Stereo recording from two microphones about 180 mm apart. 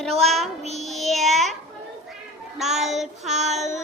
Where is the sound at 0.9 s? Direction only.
Centre (ahead or behind).